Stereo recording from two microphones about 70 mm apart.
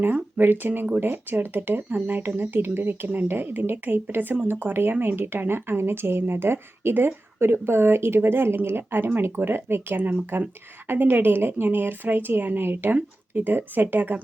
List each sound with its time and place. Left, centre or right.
0.0 s speech: right